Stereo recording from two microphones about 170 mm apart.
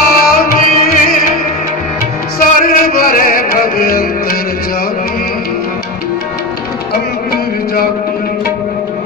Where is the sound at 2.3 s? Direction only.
55° left (ahead or behind).